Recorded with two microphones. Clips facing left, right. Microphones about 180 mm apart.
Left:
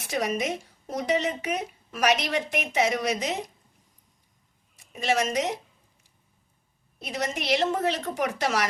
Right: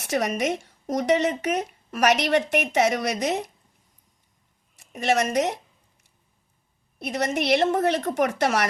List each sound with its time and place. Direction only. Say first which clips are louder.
0.1 s speech: right 3 dB; 70° right (ahead or behind)
4.9 s a woman's voice: right 3 dB; 65° right (ahead or behind)
7.0 s a woman's voice: right 5 dB; 65° right (ahead or behind)